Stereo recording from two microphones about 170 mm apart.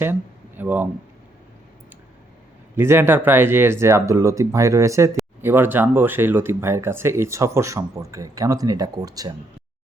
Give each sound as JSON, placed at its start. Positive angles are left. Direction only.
{"t": 0.0, "sound": "speech", "side_deg": -10}
{"t": 2.7, "sound": "speech", "side_deg": -15}